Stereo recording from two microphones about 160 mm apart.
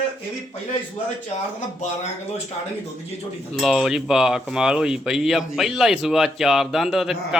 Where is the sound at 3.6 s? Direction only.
Centre (ahead or behind).